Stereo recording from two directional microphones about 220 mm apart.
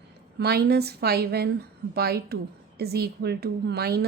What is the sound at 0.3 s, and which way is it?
A woman's voice, 50° right (ahead or behind).